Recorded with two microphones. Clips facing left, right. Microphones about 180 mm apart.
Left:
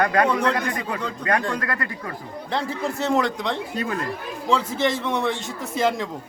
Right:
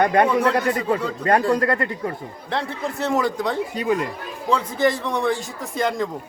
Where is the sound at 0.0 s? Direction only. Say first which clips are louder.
Right 3 dB; 25° right (ahead or behind).